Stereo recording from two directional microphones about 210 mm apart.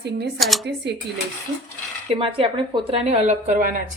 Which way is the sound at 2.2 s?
25° right (ahead or behind).